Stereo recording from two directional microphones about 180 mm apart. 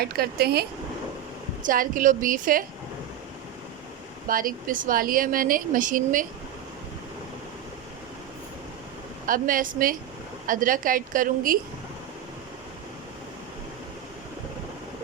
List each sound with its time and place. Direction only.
0.0 s speech: 60° right (ahead or behind)
1.6 s speech: 50° right (ahead or behind)
4.3 s speech: 50° right (ahead or behind)
9.2 s speech: 50° right (ahead or behind)